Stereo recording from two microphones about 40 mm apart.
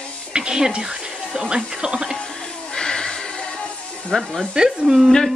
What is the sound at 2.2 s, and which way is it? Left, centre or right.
Music, centre.